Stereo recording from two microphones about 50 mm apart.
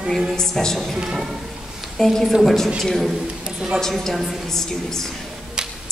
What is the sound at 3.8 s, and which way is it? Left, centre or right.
A woman's voice, centre.